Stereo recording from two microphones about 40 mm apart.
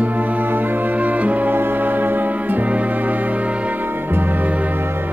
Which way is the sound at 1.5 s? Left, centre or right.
Right.